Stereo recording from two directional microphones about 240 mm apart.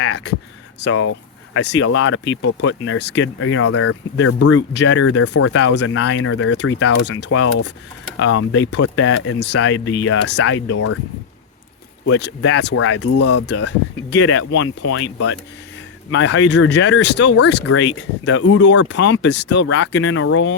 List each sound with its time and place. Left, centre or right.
0.0 s speech: left
1.5 s speech: left
5.3 s speech: left
6.0 s speech: left
8.5 s speech: left
9.7 s speech: left
10.3 s speech: left
12.0 s speech: left
12.4 s speech: left
13.1 s speech: left
13.7 s speech: left